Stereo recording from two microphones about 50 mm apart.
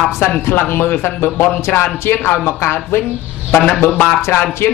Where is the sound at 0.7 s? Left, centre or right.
Left.